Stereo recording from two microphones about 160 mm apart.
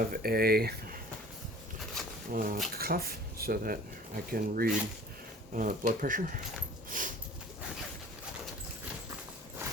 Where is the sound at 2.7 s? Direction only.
70° right (ahead or behind).